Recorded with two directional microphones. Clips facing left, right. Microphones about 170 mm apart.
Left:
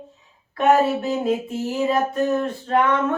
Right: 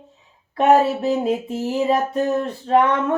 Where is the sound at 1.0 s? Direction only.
35° right (ahead or behind).